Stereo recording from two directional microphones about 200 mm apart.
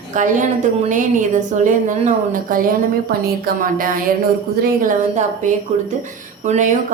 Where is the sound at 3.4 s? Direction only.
45° right (ahead or behind).